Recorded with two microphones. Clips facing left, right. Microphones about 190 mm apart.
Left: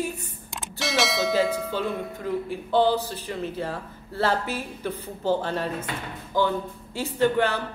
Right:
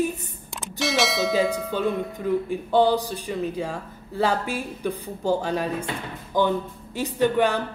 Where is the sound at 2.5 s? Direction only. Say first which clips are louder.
Right 1 dB; 15° right (ahead or behind).